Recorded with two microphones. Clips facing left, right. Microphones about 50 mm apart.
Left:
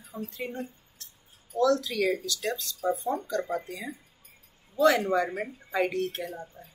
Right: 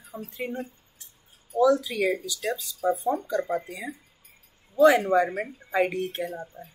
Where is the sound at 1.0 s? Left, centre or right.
Centre.